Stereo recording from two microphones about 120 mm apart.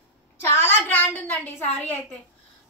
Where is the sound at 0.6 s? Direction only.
15° left (ahead or behind).